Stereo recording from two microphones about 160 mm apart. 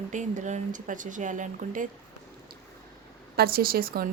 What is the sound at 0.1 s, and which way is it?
Speech, 50° right (ahead or behind).